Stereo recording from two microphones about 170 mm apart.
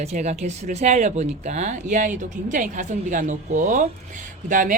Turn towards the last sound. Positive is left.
turn(degrees=-50)  # may be behind; listen again after turning